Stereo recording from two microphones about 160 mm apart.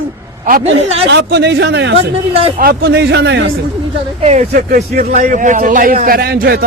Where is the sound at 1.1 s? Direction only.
90° right.